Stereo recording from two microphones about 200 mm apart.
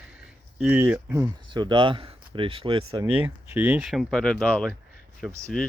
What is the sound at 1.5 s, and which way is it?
Speech, 25° right (ahead or behind).